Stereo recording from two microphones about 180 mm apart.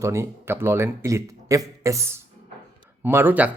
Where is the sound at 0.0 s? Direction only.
15° right (ahead or behind).